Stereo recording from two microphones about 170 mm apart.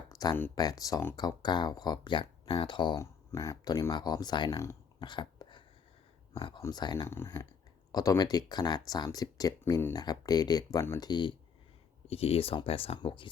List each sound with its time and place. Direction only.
0.1 s speech: 20° left (ahead or behind)
5.0 s a sound: 30° left (ahead or behind)
6.3 s speech: 25° left (ahead or behind)